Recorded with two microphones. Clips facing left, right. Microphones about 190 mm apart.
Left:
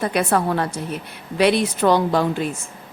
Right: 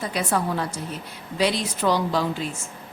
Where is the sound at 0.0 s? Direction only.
60° left (ahead or behind).